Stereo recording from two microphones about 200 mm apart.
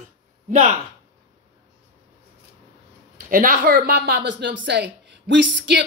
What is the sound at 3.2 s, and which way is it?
A woman's voice, 40° right (ahead or behind).